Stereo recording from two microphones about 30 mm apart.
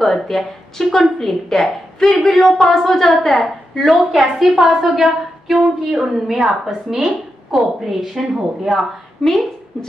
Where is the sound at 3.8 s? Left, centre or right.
Centre.